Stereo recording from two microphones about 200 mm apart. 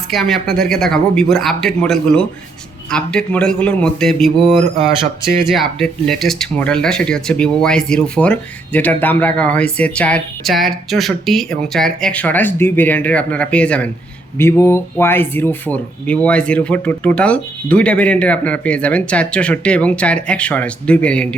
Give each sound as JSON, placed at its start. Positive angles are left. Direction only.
{"t": 0.1, "sound": "speech", "side_deg": 0}
{"t": 5.5, "sound": "speech", "side_deg": 0}